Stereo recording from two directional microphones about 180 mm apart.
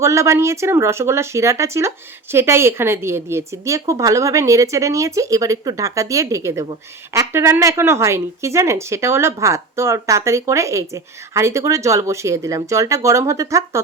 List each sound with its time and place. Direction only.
0.0 s speech: 15° right (ahead or behind)